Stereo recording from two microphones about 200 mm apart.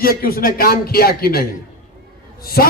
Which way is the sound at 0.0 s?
50° left (ahead or behind).